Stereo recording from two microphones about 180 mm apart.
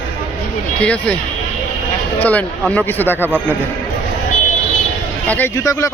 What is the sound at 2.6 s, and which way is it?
Speech, 5° left (ahead or behind).